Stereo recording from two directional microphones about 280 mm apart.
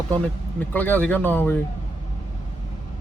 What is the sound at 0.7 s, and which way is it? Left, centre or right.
Speech, centre.